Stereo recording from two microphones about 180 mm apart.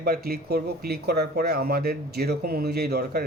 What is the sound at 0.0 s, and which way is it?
Speech, 60° right (ahead or behind).